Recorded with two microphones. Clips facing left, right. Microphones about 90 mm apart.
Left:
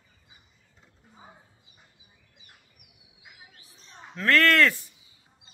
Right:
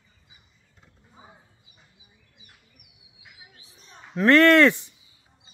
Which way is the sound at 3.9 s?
20° right (ahead or behind).